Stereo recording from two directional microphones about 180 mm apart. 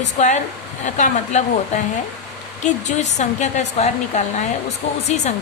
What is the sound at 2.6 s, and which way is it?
A woman's voice, 40° left (ahead or behind).